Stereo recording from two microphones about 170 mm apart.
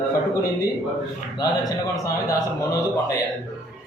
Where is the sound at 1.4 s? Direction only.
20° left (ahead or behind).